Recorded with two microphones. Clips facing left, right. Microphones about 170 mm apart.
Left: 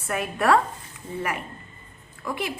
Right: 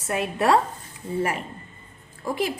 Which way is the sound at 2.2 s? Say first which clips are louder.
Right 3 dB; 40° right (ahead or behind).